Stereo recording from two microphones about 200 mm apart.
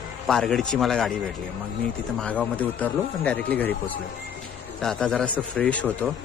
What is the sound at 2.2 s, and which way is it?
Speech, 5° left (ahead or behind).